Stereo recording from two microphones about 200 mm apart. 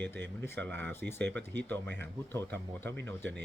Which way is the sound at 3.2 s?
65° right (ahead or behind).